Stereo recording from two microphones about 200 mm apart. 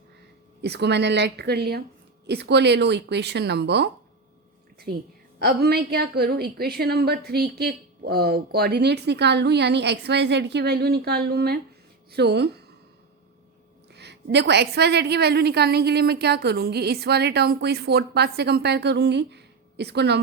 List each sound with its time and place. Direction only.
0.6 s a woman's voice: 55° right (ahead or behind)
5.4 s a woman's voice: 55° right (ahead or behind)
13.9 s a woman's voice: 55° right (ahead or behind)